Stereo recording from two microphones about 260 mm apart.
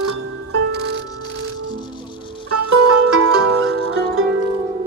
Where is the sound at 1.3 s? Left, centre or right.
Right.